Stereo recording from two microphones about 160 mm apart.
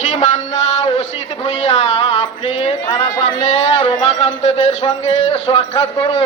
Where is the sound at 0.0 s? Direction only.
45° left (ahead or behind).